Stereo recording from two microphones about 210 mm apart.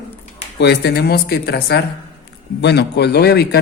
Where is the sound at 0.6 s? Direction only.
55° left (ahead or behind).